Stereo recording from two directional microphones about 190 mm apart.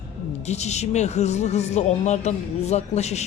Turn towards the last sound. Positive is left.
turn(degrees=35)  # may be behind; listen again after turning